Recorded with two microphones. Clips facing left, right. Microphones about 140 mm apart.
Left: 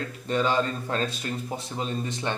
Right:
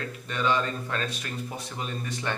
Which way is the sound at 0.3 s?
30° left (ahead or behind).